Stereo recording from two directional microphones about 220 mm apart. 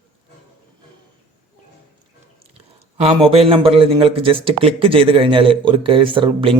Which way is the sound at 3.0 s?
25° right (ahead or behind).